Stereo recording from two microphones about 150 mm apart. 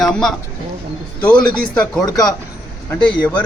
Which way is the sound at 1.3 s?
30° left (ahead or behind).